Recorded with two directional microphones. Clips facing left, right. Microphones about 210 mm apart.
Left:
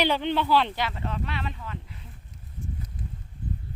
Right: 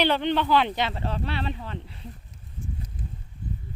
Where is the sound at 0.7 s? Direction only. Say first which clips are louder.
Right 2 dB; 25° right (ahead or behind).